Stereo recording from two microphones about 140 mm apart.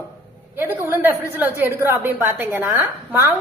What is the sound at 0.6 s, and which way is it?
A woman's voice, 15° right (ahead or behind).